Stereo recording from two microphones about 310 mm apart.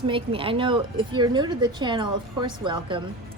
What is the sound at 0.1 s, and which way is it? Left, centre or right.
A woman's voice, centre.